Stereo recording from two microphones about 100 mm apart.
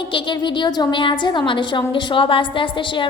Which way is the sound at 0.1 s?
50° left (ahead or behind).